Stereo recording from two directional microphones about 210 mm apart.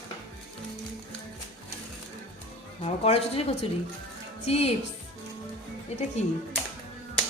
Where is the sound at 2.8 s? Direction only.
30° left (ahead or behind).